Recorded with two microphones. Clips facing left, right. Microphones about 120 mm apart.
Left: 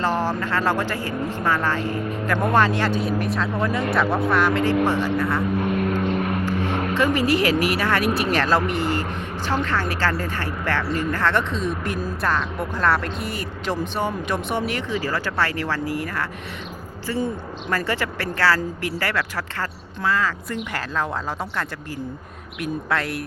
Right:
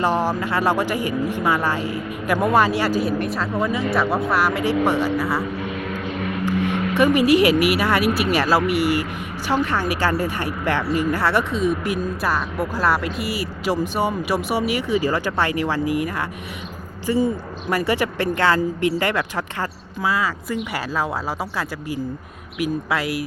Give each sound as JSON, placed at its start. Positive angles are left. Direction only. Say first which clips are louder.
{"t": 0.0, "sound": "speech", "louder": "right 2 dB", "side_deg": -15}
{"t": 5.6, "sound": "vehicle", "louder": "left 5 dB", "side_deg": 50}
{"t": 6.9, "sound": "speech", "louder": "right 5 dB", "side_deg": -15}
{"t": 22.6, "sound": "speech", "louder": "right 2 dB", "side_deg": -5}